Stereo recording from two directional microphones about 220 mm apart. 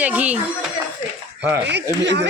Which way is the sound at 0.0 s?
5° right (ahead or behind).